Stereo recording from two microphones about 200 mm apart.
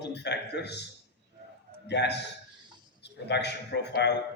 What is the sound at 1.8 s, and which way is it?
A man's voice, 55° left (ahead or behind).